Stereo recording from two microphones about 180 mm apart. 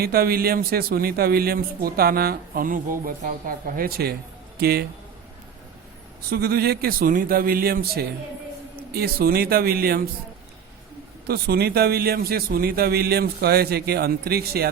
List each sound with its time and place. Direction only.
0.0 s a man's voice: 55° right (ahead or behind)
6.3 s a man's voice: 60° right (ahead or behind)
11.3 s a man's voice: 60° right (ahead or behind)